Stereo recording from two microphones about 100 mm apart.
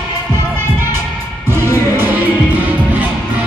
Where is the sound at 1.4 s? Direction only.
25° right (ahead or behind).